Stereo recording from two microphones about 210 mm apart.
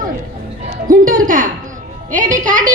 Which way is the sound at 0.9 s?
40° right (ahead or behind).